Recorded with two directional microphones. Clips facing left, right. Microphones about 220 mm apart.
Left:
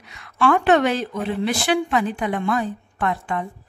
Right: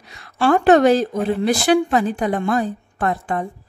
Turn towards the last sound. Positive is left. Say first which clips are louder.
# right 3 dB
turn(degrees=-40)  # may be behind; listen again after turning